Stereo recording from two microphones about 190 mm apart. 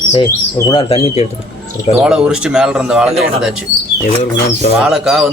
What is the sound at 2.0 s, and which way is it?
Speech, 5° right (ahead or behind).